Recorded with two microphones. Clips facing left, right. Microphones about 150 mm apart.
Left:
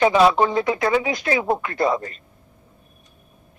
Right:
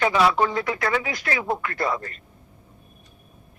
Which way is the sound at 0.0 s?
25° left (ahead or behind).